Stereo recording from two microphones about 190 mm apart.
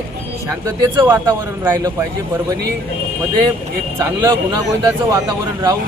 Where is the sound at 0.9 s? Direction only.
15° right (ahead or behind).